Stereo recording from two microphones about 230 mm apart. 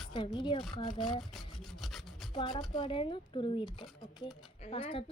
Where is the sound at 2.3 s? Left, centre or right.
Centre.